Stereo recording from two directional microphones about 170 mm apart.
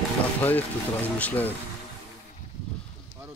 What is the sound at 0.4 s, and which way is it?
Speech, 10° left (ahead or behind).